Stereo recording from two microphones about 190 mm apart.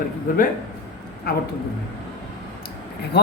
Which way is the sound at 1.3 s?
55° left (ahead or behind).